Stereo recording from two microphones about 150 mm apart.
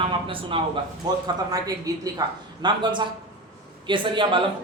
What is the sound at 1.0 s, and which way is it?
A woman's voice, 25° right (ahead or behind).